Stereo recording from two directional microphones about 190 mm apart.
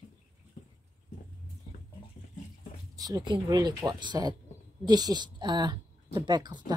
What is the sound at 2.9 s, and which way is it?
Speech, 20° right (ahead or behind).